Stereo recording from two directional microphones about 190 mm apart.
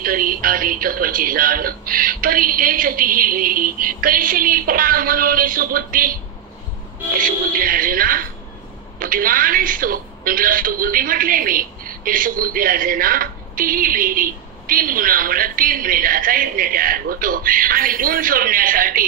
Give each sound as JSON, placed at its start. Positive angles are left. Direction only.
{"t": 0.0, "sound": "a woman's voice", "side_deg": -50}
{"t": 7.2, "sound": "a woman's voice", "side_deg": -50}